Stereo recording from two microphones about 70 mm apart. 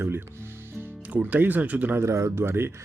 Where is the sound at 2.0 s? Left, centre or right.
Right.